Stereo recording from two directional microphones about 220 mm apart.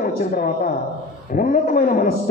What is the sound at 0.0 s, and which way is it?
A woman's voice, 40° left (ahead or behind).